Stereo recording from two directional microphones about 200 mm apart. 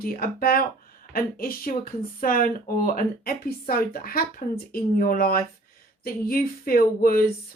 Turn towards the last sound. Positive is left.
turn(degrees=45)  # may be behind; listen again after turning